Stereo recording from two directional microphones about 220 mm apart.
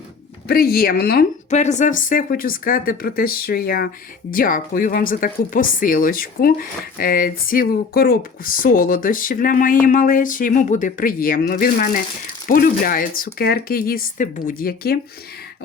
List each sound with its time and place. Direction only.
0.4 s speech: 40° left (ahead or behind)